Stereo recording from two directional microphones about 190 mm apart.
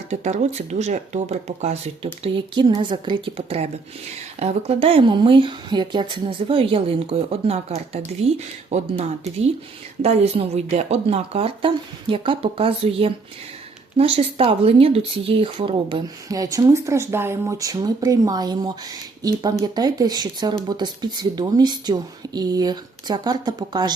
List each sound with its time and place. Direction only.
0.1 s speech: 35° right (ahead or behind); by 23.9 s 20° right (ahead or behind)